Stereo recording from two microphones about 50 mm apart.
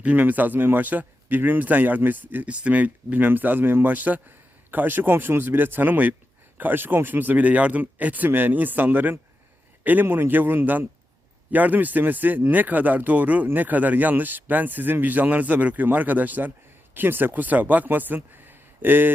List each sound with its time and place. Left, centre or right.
0.0 s speech: right
2.5 s speech: right
3.8 s speech: right